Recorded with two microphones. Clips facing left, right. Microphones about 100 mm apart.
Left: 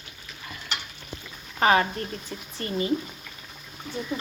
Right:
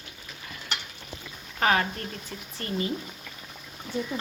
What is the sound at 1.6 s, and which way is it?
Speech, 10° left (ahead or behind).